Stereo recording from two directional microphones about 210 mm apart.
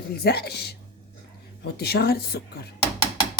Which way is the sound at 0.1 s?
50° left (ahead or behind).